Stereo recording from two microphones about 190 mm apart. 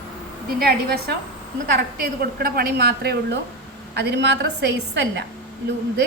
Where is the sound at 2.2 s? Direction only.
55° right (ahead or behind).